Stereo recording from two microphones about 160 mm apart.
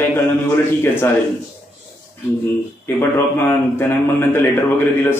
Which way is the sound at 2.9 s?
15° left (ahead or behind).